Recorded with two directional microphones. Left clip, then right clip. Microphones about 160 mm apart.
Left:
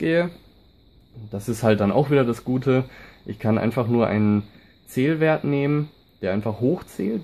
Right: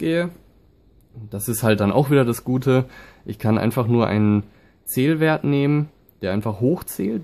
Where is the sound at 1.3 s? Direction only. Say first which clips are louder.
Even; 25° right (ahead or behind).